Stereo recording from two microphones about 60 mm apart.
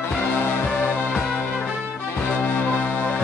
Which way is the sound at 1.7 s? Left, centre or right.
Centre.